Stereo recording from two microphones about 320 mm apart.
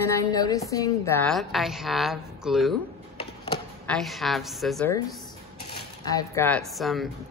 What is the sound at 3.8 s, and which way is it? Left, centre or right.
A woman's voice, centre.